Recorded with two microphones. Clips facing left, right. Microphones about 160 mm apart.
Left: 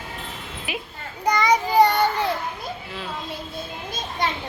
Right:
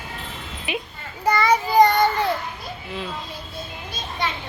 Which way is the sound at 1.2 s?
15° left (ahead or behind).